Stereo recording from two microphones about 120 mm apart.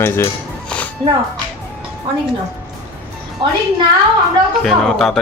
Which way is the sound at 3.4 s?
45° right (ahead or behind).